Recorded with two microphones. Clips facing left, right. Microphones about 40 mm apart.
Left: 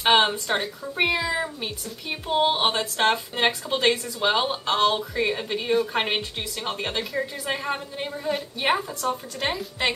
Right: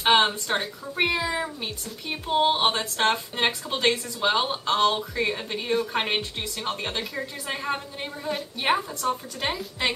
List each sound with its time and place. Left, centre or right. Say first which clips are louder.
0.0 s speech: left 1 dB; centre